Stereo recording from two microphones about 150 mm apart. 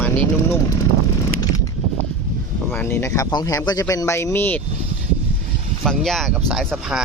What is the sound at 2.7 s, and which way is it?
Speech, 15° left (ahead or behind).